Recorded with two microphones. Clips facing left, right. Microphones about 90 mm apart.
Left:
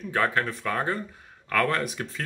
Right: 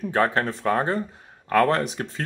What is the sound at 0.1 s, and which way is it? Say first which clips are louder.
Speech: right 3 dB; 30° right (ahead or behind).